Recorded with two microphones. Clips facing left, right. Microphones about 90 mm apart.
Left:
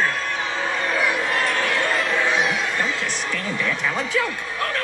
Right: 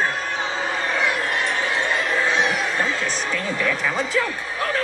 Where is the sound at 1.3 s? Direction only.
40° left (ahead or behind).